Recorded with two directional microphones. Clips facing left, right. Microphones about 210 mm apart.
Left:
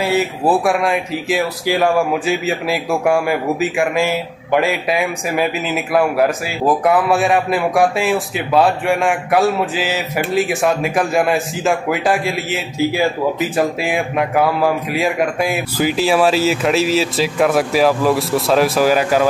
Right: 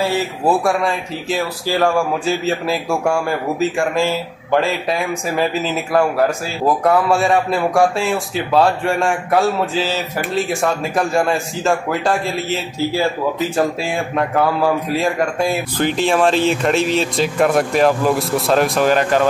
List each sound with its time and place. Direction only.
0.5 s speech: 5° left (ahead or behind)
1.7 s speech: 15° left (ahead or behind)
2.2 s speech: centre (ahead or behind)
4.0 s a man's voice: 15° left (ahead or behind)
4.9 s speech: centre (ahead or behind)
9.8 s speech: 15° left (ahead or behind)
11.0 s speech: centre (ahead or behind)
13.9 s speech: 5° left (ahead or behind)